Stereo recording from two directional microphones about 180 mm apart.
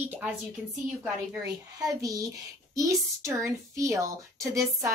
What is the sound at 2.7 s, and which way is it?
A woman's voice, 15° right (ahead or behind).